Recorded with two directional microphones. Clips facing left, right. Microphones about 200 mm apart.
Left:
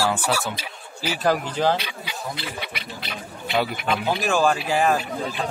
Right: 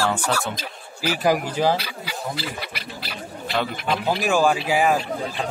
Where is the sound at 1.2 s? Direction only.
10° right (ahead or behind).